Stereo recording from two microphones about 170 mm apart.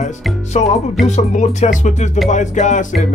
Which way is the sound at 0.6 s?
40° left (ahead or behind).